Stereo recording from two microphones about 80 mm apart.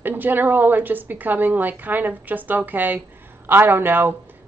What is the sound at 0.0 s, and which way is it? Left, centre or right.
A woman's voice, right.